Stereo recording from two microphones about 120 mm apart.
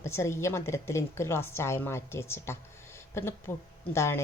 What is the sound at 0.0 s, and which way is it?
A woman's voice, 25° left (ahead or behind).